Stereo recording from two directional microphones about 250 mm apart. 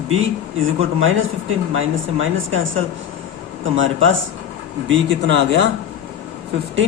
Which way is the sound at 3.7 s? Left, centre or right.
Right.